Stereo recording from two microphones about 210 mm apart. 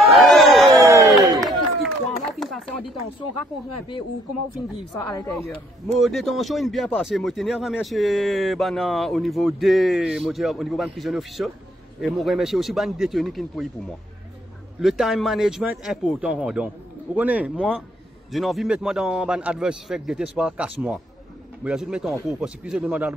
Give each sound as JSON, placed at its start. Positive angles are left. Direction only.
{"t": 0.2, "sound": "a sound", "side_deg": 0}
{"t": 0.7, "sound": "a sound", "side_deg": -15}
{"t": 2.4, "sound": "chopping", "side_deg": 0}
{"t": 4.9, "sound": "speech", "side_deg": 15}
{"t": 5.9, "sound": "speech", "side_deg": 0}
{"t": 14.8, "sound": "speech", "side_deg": 0}